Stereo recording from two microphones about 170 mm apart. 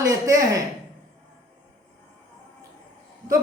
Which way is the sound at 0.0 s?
20° right (ahead or behind).